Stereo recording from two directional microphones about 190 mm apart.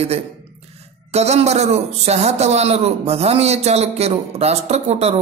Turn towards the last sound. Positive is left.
turn(degrees=-35)  # may be behind; listen again after turning